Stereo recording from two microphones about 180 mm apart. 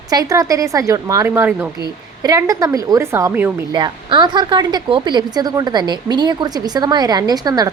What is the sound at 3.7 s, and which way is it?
A woman's voice, 25° right (ahead or behind).